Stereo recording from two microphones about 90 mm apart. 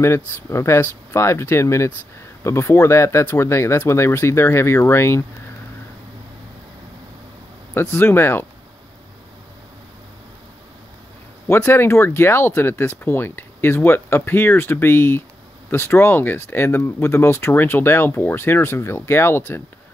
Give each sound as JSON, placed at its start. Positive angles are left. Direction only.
{"t": 0.0, "sound": "speech", "side_deg": 30}
{"t": 7.7, "sound": "speech", "side_deg": 30}
{"t": 11.4, "sound": "speech", "side_deg": 25}